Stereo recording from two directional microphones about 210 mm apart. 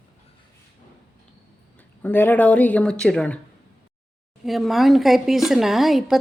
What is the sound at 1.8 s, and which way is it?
Speech, 10° left (ahead or behind).